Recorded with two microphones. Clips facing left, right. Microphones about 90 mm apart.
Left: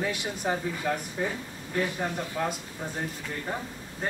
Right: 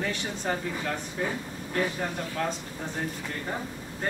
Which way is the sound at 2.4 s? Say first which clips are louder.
Even; 10° left (ahead or behind).